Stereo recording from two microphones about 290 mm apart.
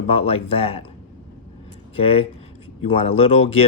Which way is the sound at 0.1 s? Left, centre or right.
Centre.